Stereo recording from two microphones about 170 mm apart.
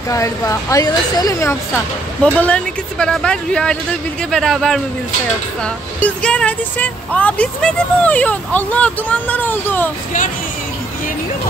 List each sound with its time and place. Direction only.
0.1 s speech: 20° left (ahead or behind)